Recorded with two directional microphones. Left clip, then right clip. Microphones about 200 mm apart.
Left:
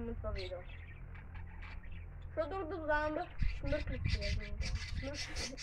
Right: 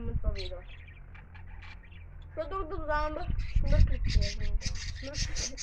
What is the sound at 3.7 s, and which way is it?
Speech, 20° right (ahead or behind).